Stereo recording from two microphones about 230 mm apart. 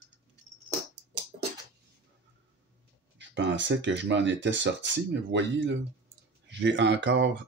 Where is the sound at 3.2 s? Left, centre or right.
Right.